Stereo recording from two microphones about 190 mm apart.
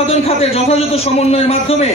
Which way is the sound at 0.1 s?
30° left (ahead or behind).